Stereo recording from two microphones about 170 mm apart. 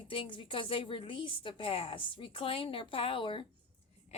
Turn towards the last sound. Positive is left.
turn(degrees=30)  # may be behind; listen again after turning